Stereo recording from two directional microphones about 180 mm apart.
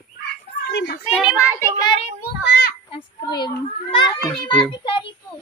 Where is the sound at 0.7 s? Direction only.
70° left (ahead or behind).